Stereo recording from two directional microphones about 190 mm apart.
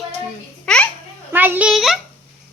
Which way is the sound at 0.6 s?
5° left (ahead or behind).